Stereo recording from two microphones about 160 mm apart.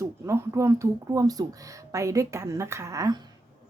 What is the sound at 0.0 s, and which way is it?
A woman's voice, 20° right (ahead or behind).